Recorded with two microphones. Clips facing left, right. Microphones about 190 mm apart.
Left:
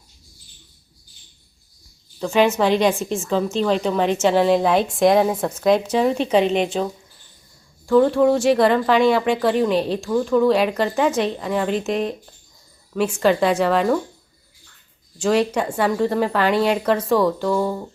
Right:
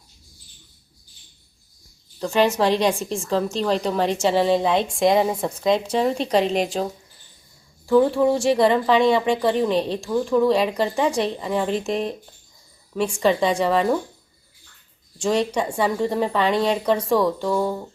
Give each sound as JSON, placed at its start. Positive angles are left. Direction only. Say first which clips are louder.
{"t": 2.2, "sound": "a woman's voice", "louder": "left 2 dB", "side_deg": 0}
{"t": 7.9, "sound": "a woman's voice", "louder": "left 2 dB", "side_deg": -5}
{"t": 13.2, "sound": "a woman's voice", "louder": "left 2 dB", "side_deg": 5}
{"t": 15.2, "sound": "a woman's voice", "louder": "left 2 dB", "side_deg": 5}